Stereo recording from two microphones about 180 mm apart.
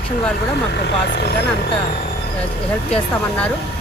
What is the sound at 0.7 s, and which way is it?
Speech, 70° left (ahead or behind).